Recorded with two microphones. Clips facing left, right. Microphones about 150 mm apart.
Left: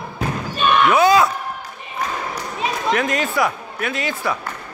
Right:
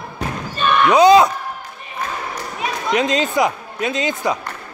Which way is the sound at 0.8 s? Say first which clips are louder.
Right 6 dB; 20° right (ahead or behind).